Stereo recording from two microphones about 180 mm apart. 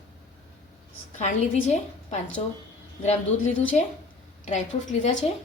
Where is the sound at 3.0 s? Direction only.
40° left (ahead or behind).